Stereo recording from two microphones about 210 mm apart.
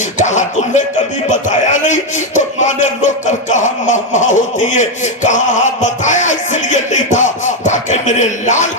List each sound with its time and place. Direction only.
0.2 s a man's voice: 35° left (ahead or behind)